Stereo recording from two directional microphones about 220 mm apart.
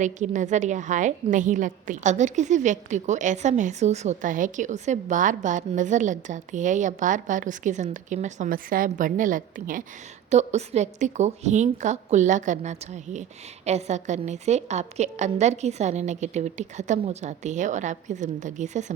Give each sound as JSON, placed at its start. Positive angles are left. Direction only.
{"t": 0.0, "sound": "a woman's voice", "side_deg": -35}